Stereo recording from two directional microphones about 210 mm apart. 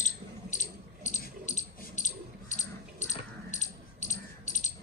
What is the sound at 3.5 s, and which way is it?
Keys jangling, 35° left (ahead or behind).